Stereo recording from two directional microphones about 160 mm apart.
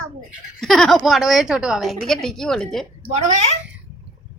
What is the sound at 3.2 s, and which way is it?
Speech, 40° right (ahead or behind).